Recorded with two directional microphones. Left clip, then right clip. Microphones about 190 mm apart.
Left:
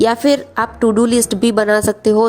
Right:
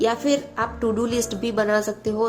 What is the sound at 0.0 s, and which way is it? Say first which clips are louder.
A woman's voice: left 8 dB; 50° left (ahead or behind).